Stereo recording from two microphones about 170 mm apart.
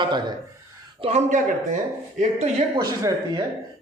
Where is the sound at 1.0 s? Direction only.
45° right (ahead or behind).